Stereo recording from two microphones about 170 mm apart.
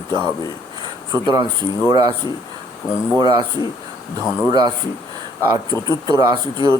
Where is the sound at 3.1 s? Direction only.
25° right (ahead or behind).